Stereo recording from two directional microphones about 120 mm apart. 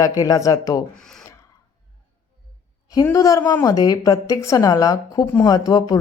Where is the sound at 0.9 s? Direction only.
5° left (ahead or behind).